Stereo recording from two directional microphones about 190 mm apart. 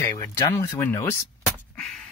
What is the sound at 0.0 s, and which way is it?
Speech, 15° left (ahead or behind).